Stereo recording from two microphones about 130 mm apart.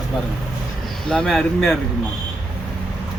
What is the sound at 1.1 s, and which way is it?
Speech, 5° left (ahead or behind).